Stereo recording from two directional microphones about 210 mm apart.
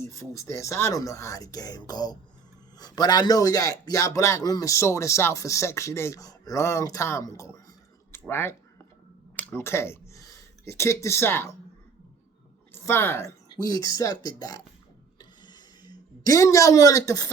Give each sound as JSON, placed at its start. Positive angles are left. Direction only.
{"t": 0.0, "sound": "a man's voice", "side_deg": 15}
{"t": 12.7, "sound": "a man's voice", "side_deg": 10}
{"t": 15.2, "sound": "a sound", "side_deg": 20}